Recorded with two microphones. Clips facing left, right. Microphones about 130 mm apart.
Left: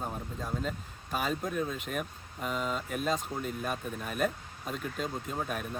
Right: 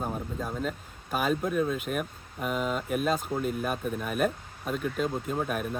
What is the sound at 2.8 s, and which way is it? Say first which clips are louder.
Speech: right 4 dB; 5° right (ahead or behind).